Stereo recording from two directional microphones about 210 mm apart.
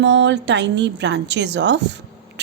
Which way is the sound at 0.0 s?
60° right (ahead or behind).